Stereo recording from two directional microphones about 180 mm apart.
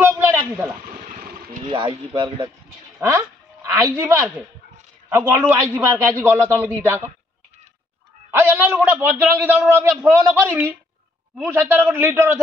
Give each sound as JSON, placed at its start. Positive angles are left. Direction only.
{"t": 0.0, "sound": "a sound", "side_deg": -15}
{"t": 0.4, "sound": "speech", "side_deg": -15}
{"t": 1.7, "sound": "speech", "side_deg": -25}
{"t": 3.0, "sound": "a man's voice", "side_deg": -10}
{"t": 8.3, "sound": "a man's voice", "side_deg": -10}